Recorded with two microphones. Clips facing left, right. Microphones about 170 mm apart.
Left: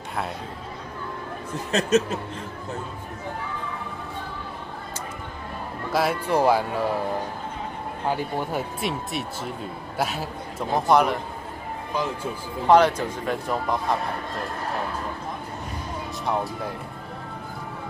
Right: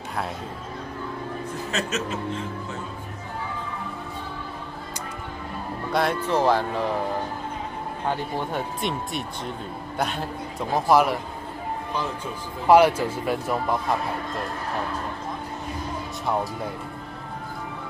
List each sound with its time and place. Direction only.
1.7 s speech: 40° left (ahead or behind)
5.9 s speech: 5° left (ahead or behind)
8.1 s a man's voice: 5° left (ahead or behind)
12.6 s speech: 10° right (ahead or behind)